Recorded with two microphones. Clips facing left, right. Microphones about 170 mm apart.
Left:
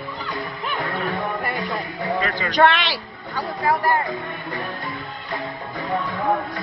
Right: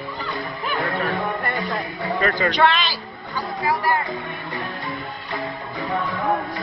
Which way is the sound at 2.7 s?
70° left (ahead or behind).